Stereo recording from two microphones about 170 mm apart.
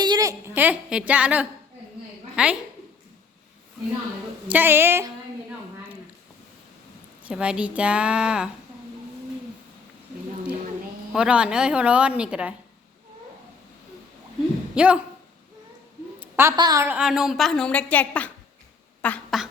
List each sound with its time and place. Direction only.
0.0 s a woman's voice: 20° right (ahead or behind); by 2.6 s 5° right (ahead or behind)
4.4 s a woman's voice: 10° right (ahead or behind)
7.3 s a woman's voice: 5° right (ahead or behind)
11.1 s a woman's voice: 5° right (ahead or behind)
14.8 s a woman's voice: 5° right (ahead or behind)
16.2 s a woman's voice: 10° right (ahead or behind)
16.9 s a woman's voice: 5° right (ahead or behind)
19.0 s a sound: 5° left (ahead or behind)